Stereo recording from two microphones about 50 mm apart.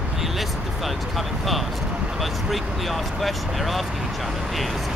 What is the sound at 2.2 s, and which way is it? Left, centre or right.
Speech, centre.